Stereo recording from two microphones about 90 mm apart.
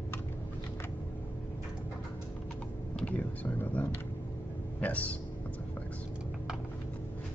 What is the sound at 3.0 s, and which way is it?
Speech, 20° left (ahead or behind).